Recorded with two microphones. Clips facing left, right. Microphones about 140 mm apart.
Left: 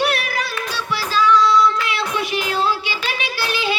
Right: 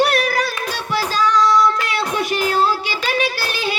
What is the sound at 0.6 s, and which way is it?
Child singing, 45° right (ahead or behind).